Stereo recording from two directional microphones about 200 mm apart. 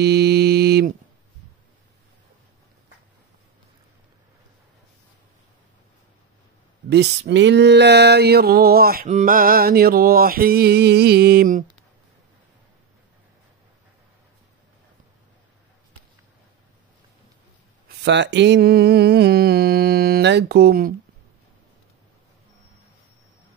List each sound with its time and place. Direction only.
0.0 s mantra: 55° right (ahead or behind)
6.9 s a sound: 55° right (ahead or behind)
9.0 s mantra: 40° right (ahead or behind)
17.8 s mantra: 60° right (ahead or behind)